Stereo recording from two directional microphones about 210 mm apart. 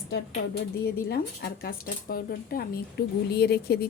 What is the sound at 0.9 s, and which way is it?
Speech, 50° left (ahead or behind).